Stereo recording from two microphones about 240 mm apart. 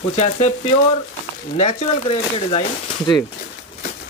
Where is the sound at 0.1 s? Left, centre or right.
Left.